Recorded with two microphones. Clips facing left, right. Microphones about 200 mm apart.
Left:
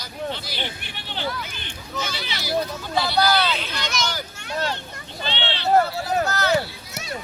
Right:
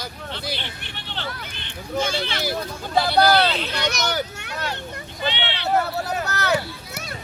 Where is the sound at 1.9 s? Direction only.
50° right (ahead or behind).